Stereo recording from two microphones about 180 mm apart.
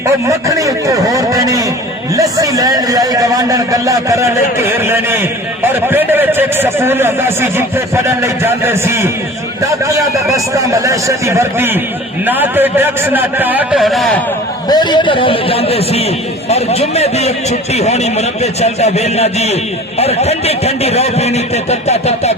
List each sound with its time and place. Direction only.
0.3 s a man's voice: 20° right (ahead or behind); by 14.2 s centre (ahead or behind)
14.7 s a man's voice: 25° left (ahead or behind)